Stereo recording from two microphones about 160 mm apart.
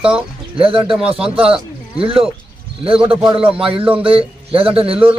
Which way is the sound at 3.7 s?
35° right (ahead or behind).